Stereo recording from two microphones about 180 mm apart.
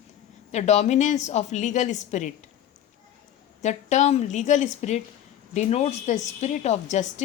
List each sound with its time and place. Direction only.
0.5 s a woman's voice: 40° left (ahead or behind)
3.6 s a woman's voice: 40° left (ahead or behind)